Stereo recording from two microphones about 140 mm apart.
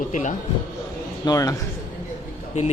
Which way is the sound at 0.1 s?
65° left (ahead or behind).